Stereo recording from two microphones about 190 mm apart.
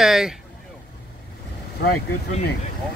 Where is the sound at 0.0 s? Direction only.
Centre (ahead or behind).